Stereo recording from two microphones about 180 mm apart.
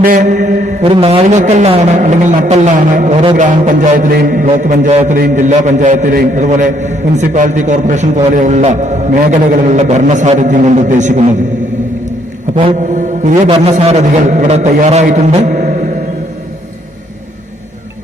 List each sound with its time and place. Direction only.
0.0 s a man's voice: 45° right (ahead or behind)
0.8 s a man's voice: 30° right (ahead or behind)
12.9 s a man's voice: 45° right (ahead or behind)